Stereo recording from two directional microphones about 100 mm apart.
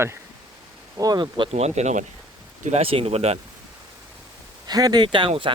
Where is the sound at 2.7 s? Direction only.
75° right (ahead or behind); by 3.4 s 90° right.